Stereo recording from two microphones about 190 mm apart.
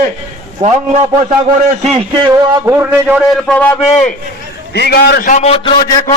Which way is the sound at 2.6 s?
10° right (ahead or behind).